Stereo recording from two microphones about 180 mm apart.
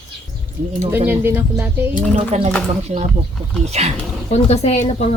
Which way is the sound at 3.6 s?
35° right (ahead or behind).